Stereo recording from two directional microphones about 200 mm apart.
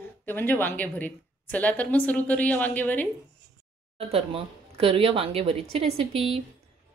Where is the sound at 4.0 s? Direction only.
30° right (ahead or behind).